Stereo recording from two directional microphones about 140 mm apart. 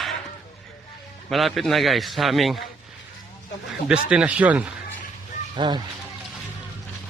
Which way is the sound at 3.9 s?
5° right (ahead or behind).